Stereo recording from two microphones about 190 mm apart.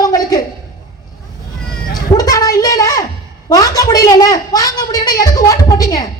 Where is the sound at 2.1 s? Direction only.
20° left (ahead or behind).